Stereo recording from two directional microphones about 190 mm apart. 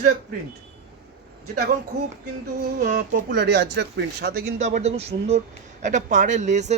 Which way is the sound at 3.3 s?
65° right (ahead or behind).